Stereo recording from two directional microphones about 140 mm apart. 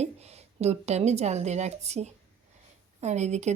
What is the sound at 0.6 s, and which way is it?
A woman's voice, 50° right (ahead or behind).